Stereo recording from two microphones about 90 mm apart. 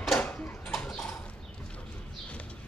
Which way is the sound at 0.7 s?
10° left (ahead or behind).